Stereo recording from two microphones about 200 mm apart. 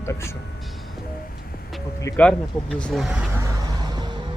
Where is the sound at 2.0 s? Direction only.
15° left (ahead or behind).